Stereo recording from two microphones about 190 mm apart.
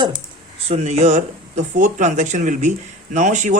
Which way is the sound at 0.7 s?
35° right (ahead or behind).